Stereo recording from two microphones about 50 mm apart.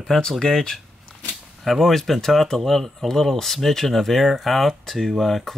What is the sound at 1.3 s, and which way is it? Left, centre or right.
Speech, centre.